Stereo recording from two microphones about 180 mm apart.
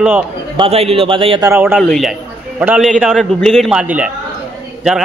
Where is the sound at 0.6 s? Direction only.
35° right (ahead or behind).